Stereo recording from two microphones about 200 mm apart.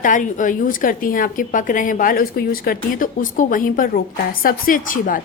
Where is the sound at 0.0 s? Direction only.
40° left (ahead or behind).